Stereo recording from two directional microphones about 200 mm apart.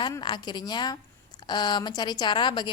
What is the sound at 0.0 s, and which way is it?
A woman's voice, 25° left (ahead or behind).